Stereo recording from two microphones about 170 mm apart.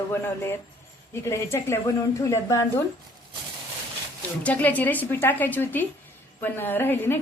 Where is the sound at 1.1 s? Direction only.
15° left (ahead or behind).